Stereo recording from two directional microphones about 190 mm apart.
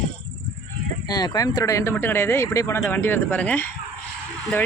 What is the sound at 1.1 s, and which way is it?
Speech, 20° left (ahead or behind).